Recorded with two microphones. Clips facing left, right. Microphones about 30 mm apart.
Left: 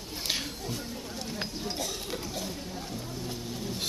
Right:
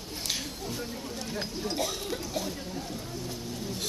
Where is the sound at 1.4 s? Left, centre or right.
Centre.